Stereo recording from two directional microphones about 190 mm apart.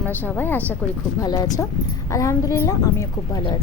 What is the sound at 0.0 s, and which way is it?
A woman's voice, 10° left (ahead or behind).